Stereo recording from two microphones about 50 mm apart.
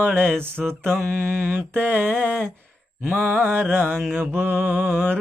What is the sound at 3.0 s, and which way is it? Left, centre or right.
Mantra, right.